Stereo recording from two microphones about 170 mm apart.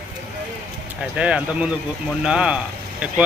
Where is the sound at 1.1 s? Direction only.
5° right (ahead or behind).